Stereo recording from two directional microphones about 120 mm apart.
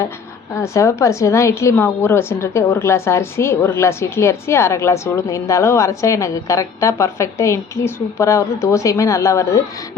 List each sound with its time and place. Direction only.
0.6 s a woman's voice: 25° left (ahead or behind)